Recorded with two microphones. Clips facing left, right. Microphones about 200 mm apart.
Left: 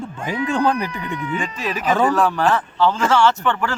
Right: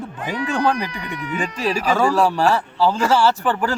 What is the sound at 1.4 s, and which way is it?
A man's voice, 35° right (ahead or behind).